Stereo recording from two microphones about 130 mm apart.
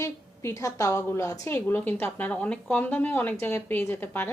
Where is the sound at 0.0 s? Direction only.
20° left (ahead or behind).